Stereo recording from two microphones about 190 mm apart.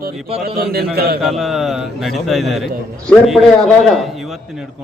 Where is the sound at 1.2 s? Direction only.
Centre (ahead or behind).